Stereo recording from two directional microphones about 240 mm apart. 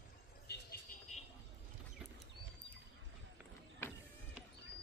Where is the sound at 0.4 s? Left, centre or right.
Left.